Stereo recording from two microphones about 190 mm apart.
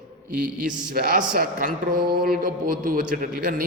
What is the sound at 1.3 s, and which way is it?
A man's voice, 50° right (ahead or behind).